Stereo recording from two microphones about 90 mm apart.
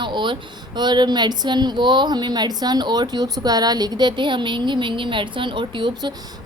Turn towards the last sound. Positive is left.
turn(degrees=-50)  # may be behind; listen again after turning